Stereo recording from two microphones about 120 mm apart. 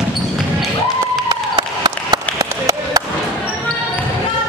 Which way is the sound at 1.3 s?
40° right (ahead or behind).